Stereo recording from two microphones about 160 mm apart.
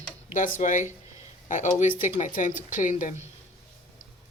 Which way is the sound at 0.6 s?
50° left (ahead or behind).